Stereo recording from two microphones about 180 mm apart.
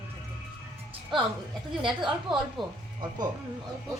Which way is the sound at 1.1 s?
25° right (ahead or behind).